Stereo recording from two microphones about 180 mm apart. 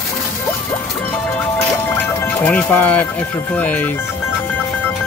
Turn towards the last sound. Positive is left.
turn(degrees=10)  # may be behind; listen again after turning